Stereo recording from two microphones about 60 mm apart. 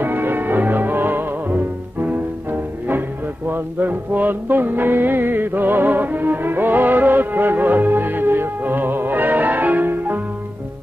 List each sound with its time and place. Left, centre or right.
0.0 s music: right
3.4 s music: right